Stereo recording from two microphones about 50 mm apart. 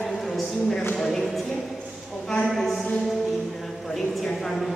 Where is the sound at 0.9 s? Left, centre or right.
Centre.